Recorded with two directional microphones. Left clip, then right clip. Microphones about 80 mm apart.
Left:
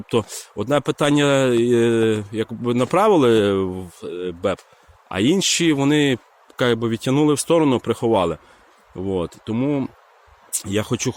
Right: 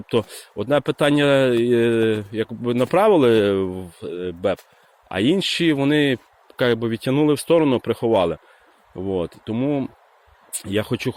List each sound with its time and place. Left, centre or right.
0.1 s speech: left